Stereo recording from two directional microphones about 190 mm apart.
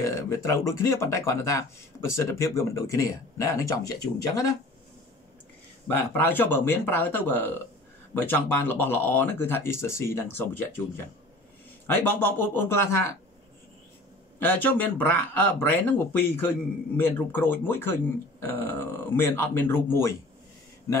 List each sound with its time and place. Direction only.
0.0 s speech: 15° left (ahead or behind)
5.9 s speech: 10° left (ahead or behind)
14.4 s speech: 10° left (ahead or behind)